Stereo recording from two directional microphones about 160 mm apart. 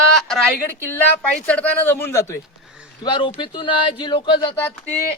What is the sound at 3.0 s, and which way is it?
Speech, 30° left (ahead or behind).